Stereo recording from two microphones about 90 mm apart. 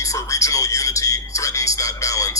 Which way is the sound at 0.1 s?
35° left (ahead or behind).